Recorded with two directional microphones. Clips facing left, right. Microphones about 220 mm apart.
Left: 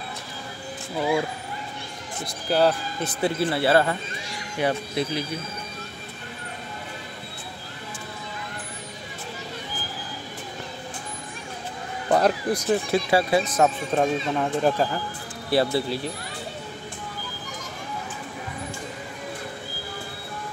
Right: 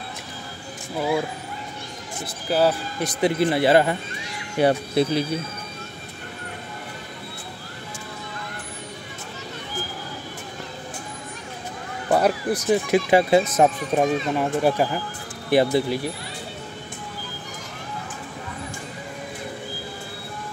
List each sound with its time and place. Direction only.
0.9 s speech: 5° right (ahead or behind)
2.5 s speech: centre (ahead or behind)
3.0 s speech: 15° right (ahead or behind)
4.6 s speech: 30° right (ahead or behind)
12.1 s speech: 5° right (ahead or behind)
13.9 s speech: 10° right (ahead or behind)